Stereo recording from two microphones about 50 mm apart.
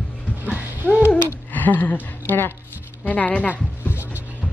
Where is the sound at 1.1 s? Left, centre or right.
Left.